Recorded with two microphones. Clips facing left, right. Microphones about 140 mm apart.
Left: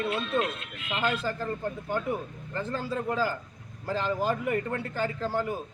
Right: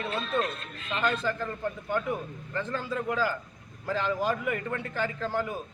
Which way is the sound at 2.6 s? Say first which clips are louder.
Even; 35° left (ahead or behind).